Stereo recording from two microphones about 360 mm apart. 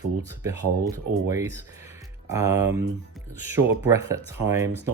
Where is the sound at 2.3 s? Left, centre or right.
Centre.